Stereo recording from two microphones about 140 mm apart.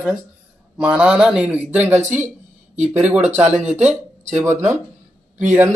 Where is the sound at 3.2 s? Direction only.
55° right (ahead or behind).